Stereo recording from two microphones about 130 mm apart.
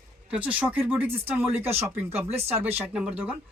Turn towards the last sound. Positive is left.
turn(degrees=-10)  # may be behind; listen again after turning